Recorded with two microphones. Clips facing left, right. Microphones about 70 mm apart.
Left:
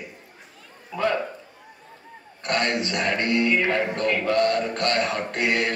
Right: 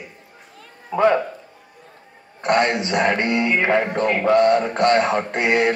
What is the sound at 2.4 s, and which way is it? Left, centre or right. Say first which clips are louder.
Speech: right 6 dB; right.